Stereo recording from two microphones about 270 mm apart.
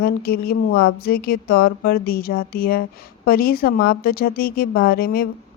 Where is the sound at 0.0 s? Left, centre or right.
Left.